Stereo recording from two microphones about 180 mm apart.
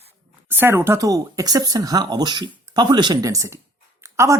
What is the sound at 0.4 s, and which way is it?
A woman's voice, 10° right (ahead or behind).